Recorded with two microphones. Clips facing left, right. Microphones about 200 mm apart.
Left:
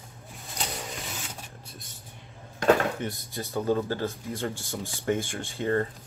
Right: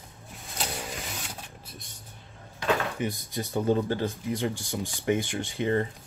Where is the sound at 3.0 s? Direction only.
15° right (ahead or behind).